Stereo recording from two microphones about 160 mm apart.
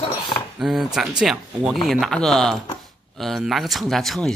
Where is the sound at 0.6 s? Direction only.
Centre (ahead or behind).